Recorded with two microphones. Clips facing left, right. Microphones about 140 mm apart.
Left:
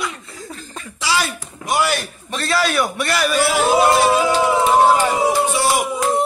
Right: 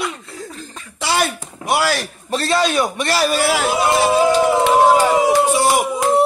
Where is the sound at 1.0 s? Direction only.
55° right (ahead or behind); by 2.1 s 85° right.